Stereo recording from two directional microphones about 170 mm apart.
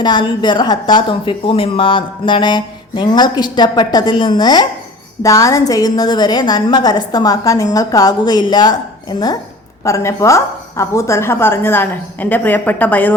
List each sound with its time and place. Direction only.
0.0 s speech: 25° left (ahead or behind); by 13.1 s 10° left (ahead or behind)